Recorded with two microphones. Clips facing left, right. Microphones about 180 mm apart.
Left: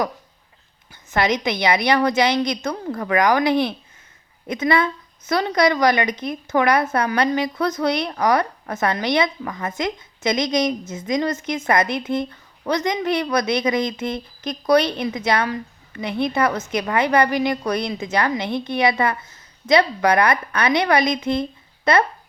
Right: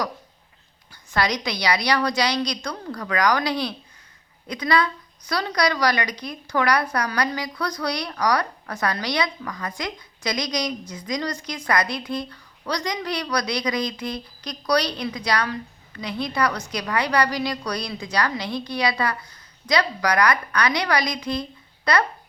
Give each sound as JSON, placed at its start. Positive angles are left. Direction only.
{"t": 1.1, "sound": "a woman's voice", "side_deg": 20}